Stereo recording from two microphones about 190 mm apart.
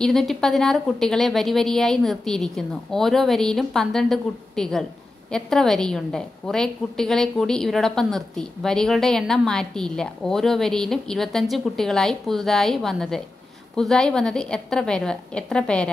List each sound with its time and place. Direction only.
0.0 s a woman's voice: centre (ahead or behind)